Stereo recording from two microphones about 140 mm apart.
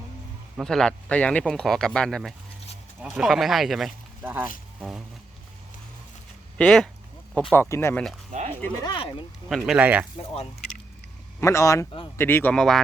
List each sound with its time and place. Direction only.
0.6 s speech: 5° left (ahead or behind)
4.2 s speech: 15° right (ahead or behind)
6.6 s speech: 5° left (ahead or behind)
7.5 s speech: 15° left (ahead or behind)
8.3 s dog: 55° right (ahead or behind)
8.8 s speech: 35° left (ahead or behind)
9.5 s speech: centre (ahead or behind)
9.7 s speech: 10° right (ahead or behind)
11.3 s speech: 20° left (ahead or behind); by 12.8 s 5° left (ahead or behind)